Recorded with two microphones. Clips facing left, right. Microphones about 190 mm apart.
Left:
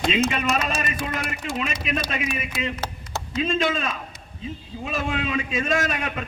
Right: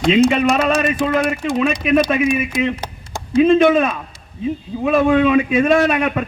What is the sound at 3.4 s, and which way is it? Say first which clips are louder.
A man's voice: right 12 dB; 60° right (ahead or behind).